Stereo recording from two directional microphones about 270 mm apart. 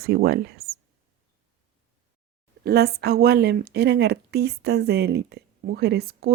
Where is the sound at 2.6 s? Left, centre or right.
Right.